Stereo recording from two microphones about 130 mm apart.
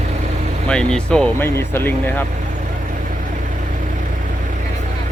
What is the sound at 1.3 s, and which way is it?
Speech, 20° left (ahead or behind).